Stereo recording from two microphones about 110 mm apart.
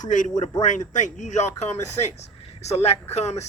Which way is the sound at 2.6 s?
80° left.